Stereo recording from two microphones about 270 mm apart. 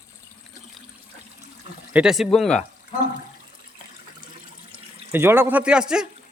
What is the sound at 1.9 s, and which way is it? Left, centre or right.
Speech, centre.